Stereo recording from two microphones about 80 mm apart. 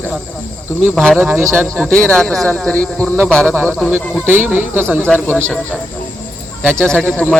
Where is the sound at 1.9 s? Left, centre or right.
Centre.